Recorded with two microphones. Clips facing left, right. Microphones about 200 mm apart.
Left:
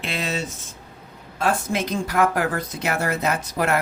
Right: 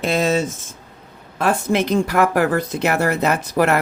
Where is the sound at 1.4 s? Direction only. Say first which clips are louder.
Right 5 dB; 60° right (ahead or behind).